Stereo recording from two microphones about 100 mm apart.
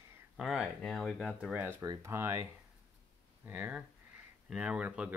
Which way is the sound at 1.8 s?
30° right (ahead or behind).